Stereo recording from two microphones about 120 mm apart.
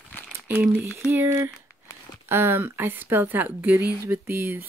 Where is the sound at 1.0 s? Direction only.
20° right (ahead or behind).